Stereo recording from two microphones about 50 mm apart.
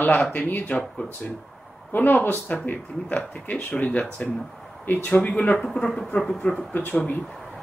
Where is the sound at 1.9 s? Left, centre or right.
Left.